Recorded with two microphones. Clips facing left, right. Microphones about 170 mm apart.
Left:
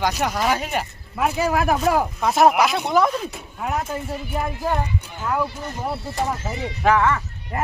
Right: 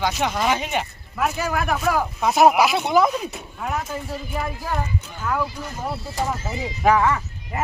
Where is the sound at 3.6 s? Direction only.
10° left (ahead or behind).